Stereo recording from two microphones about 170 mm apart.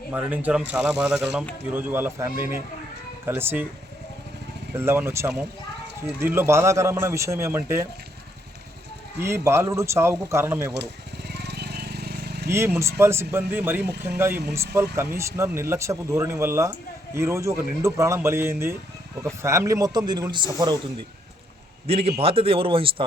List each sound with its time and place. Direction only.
0.1 s speech: 10° right (ahead or behind)
4.7 s speech: 15° right (ahead or behind)
9.1 s speech: 15° right (ahead or behind)
11.3 s vehicle: 80° right
12.5 s a man's voice: 15° right (ahead or behind)
21.8 s speech: 35° right (ahead or behind)